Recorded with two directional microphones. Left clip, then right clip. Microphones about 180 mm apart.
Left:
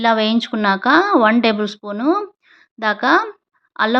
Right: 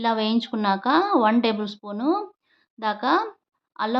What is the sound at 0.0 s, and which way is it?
A woman's voice, 15° left (ahead or behind).